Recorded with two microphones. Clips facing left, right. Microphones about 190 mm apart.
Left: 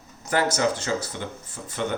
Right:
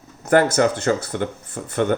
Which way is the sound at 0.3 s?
55° right (ahead or behind).